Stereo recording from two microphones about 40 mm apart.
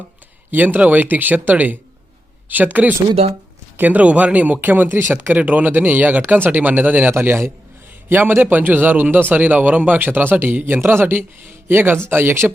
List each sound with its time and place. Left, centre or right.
0.5 s speech: right
5.3 s speech: right
7.1 s a man's voice: right
8.4 s speech: right
11.0 s speech: right
12.0 s speech: right